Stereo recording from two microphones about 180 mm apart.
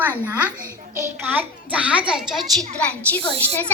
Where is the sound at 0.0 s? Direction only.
10° right (ahead or behind).